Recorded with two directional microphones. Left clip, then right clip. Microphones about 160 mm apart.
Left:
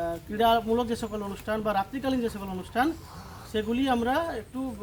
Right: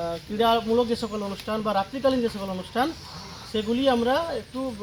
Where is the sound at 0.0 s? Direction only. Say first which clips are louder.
Right 1 dB; 20° left (ahead or behind).